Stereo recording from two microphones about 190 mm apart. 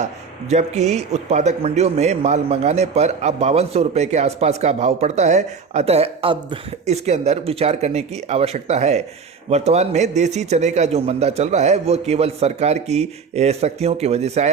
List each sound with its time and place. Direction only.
0.0 s speech: 35° right (ahead or behind)